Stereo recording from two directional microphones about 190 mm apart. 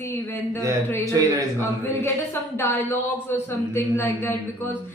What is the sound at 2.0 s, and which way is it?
A woman's voice, 15° left (ahead or behind).